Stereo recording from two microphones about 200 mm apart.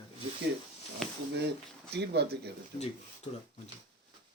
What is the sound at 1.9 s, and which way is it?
Speech, 55° right (ahead or behind).